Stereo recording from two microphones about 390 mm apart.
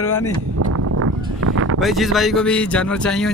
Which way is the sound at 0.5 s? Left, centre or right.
Right.